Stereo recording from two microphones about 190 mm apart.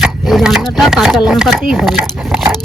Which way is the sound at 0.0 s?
Centre (ahead or behind).